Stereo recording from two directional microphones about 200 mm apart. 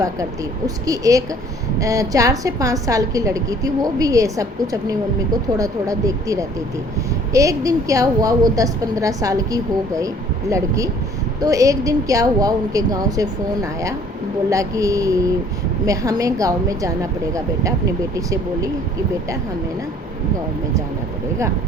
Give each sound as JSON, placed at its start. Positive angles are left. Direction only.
{"t": 0.9, "sound": "a woman's voice", "side_deg": -15}